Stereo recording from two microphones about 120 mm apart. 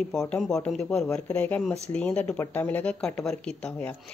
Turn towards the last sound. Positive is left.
turn(degrees=10)  # may be behind; listen again after turning